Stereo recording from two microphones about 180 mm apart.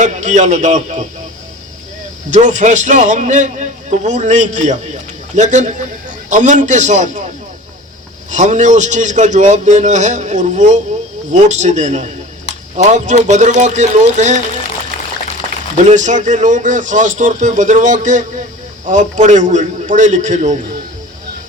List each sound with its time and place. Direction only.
0.0 s a man's voice: 40° right (ahead or behind)
2.3 s a man's voice: 45° right (ahead or behind)
8.3 s a man's voice: 40° right (ahead or behind)
15.7 s a man's voice: 40° right (ahead or behind)